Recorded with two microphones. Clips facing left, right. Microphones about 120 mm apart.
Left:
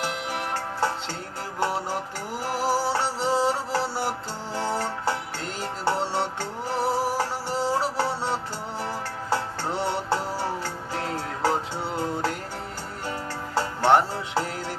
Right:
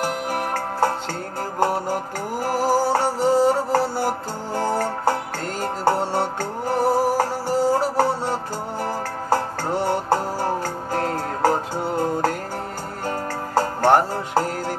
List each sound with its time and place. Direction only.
0.0 s music: 45° right (ahead or behind)